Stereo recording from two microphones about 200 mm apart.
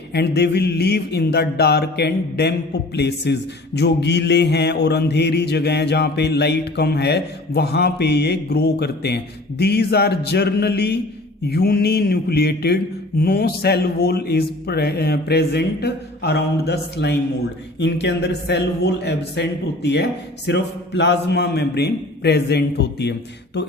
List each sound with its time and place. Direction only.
0.1 s mantra: 55° left (ahead or behind)
11.4 s speech: 50° left (ahead or behind)
17.7 s mantra: 60° left (ahead or behind)